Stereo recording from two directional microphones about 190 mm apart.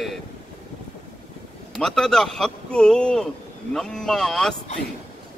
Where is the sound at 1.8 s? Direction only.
Centre (ahead or behind).